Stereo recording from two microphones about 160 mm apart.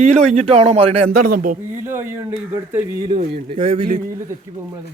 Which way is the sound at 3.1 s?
40° right (ahead or behind).